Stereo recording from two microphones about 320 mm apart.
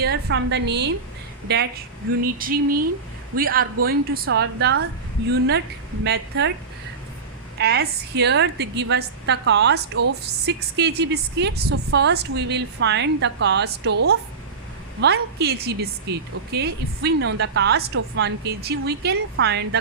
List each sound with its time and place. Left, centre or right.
0.0 s a woman's voice: right
2.2 s a sound: right
3.8 s a woman's voice: right
7.6 s a woman's voice: right